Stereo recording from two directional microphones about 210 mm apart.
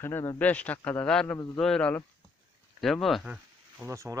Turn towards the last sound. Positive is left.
turn(degrees=-15)  # may be behind; listen again after turning